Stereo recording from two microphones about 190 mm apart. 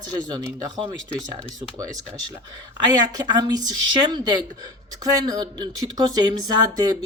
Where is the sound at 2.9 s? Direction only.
20° right (ahead or behind).